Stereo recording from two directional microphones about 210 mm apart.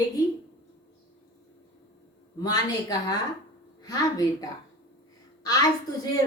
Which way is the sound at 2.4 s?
20° left (ahead or behind).